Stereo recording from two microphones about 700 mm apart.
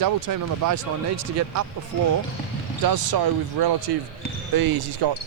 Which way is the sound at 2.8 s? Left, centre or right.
Right.